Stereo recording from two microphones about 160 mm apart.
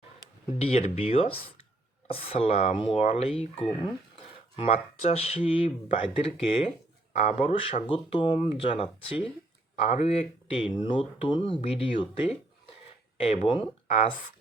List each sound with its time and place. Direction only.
0.6 s speech: 45° left (ahead or behind)